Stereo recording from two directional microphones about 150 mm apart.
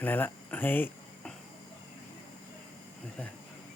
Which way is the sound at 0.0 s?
10° left (ahead or behind).